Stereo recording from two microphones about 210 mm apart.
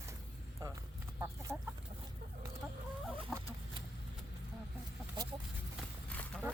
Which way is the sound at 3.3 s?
Centre (ahead or behind).